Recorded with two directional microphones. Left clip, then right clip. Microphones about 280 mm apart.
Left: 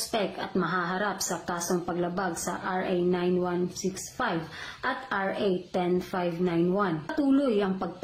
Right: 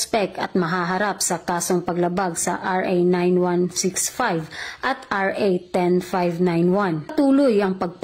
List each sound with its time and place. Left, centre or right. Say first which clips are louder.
0.1 s a woman's voice: right 7 dB; right
4.8 s a woman's voice: right 7 dB; right